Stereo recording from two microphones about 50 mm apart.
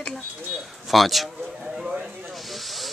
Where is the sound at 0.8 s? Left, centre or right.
Centre.